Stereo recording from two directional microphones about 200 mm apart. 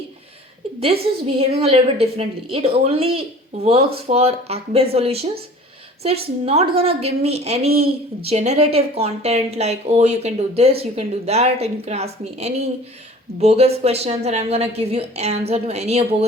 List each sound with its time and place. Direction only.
1.4 s a woman's voice: 30° right (ahead or behind)